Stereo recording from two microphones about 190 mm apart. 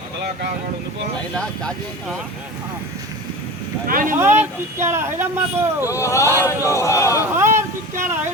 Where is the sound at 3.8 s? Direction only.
45° right (ahead or behind).